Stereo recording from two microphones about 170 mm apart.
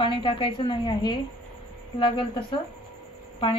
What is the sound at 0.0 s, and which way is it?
A woman's voice, 30° left (ahead or behind).